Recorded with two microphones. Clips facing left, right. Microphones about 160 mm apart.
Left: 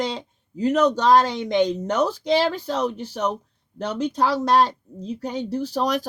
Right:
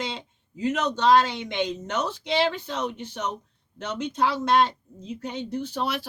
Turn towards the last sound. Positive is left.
turn(degrees=40)  # may be behind; listen again after turning